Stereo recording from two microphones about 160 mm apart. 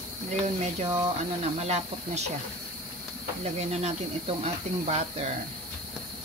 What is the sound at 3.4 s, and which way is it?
Speech, 45° right (ahead or behind).